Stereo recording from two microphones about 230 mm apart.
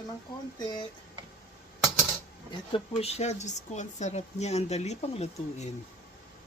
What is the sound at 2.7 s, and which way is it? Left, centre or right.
Speech, left.